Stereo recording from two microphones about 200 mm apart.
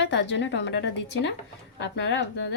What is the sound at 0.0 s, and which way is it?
A woman's voice, 60° left (ahead or behind).